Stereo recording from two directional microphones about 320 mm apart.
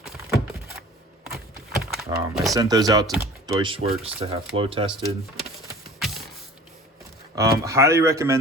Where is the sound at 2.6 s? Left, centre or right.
Centre.